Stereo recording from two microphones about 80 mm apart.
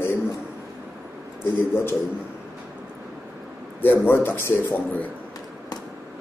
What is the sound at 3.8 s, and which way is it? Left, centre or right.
A man's voice, left.